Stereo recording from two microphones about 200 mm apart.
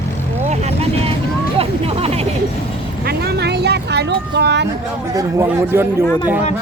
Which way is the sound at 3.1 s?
55° right (ahead or behind).